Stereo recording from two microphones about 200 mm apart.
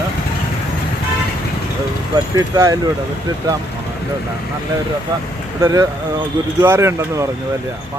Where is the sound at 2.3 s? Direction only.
20° right (ahead or behind).